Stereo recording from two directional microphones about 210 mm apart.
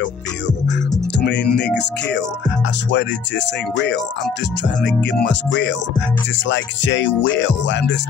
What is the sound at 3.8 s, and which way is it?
Music, 60° left (ahead or behind).